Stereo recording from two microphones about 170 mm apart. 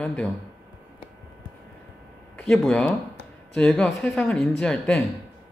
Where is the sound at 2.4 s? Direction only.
5° left (ahead or behind).